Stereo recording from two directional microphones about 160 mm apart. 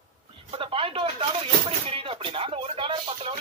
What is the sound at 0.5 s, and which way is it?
Speech, 35° right (ahead or behind).